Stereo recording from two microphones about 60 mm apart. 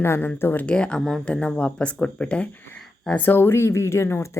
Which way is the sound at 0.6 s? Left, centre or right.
Centre.